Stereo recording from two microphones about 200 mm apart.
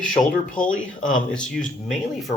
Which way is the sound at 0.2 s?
35° left (ahead or behind).